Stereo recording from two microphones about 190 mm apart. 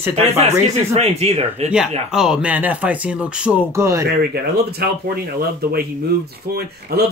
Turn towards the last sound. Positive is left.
turn(degrees=-55)  # may be behind; listen again after turning